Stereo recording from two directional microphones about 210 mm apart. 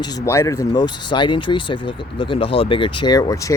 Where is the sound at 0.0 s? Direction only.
15° left (ahead or behind).